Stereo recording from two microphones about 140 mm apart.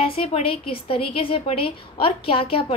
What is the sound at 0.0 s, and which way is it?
A woman's voice, 40° left (ahead or behind).